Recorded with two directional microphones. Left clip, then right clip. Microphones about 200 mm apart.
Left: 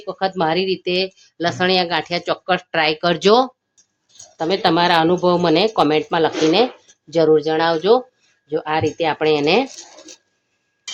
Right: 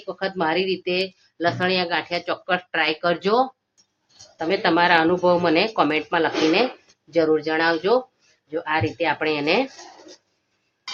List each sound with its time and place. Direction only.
0.0 s speech: 55° left (ahead or behind)